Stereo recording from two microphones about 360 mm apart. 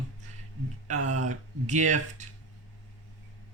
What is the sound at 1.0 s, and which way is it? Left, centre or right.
Speech, centre.